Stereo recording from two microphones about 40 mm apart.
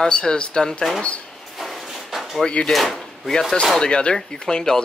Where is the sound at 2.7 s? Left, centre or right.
Centre.